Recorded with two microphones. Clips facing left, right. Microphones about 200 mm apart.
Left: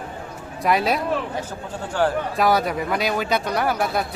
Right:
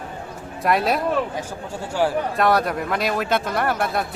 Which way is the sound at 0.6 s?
Centre (ahead or behind).